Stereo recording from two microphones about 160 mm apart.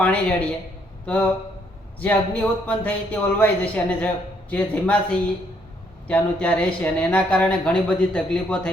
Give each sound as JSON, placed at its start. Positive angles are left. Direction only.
{"t": 0.0, "sound": "speech", "side_deg": 10}